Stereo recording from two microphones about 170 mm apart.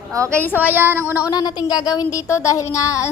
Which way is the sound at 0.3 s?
10° left (ahead or behind).